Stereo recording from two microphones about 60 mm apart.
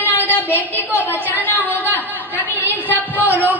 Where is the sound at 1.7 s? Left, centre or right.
Left.